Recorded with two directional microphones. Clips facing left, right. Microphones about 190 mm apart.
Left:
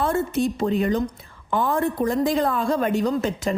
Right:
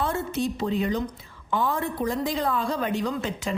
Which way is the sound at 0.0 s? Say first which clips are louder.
Left 5 dB; 50° left (ahead or behind).